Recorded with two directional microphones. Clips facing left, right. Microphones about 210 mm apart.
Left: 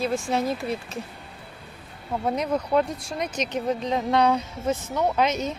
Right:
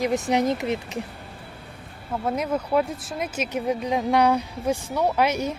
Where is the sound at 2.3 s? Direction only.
5° right (ahead or behind).